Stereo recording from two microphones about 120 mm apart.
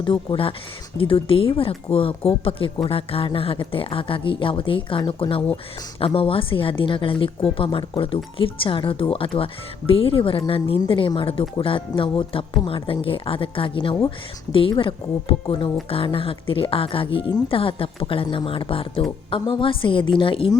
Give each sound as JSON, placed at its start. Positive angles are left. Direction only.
{"t": 0.0, "sound": "a woman's voice", "side_deg": 45}